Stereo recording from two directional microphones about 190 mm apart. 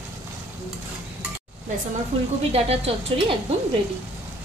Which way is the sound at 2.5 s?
30° right (ahead or behind).